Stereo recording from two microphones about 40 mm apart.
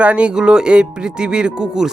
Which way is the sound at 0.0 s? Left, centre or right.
Right.